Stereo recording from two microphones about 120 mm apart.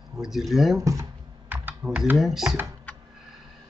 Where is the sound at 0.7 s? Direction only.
25° right (ahead or behind).